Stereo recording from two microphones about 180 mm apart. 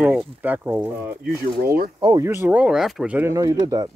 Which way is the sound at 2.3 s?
10° right (ahead or behind).